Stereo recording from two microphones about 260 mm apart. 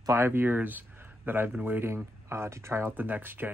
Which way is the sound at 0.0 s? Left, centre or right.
Centre.